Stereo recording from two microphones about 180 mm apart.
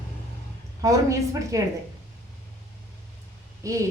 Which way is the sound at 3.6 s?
15° right (ahead or behind).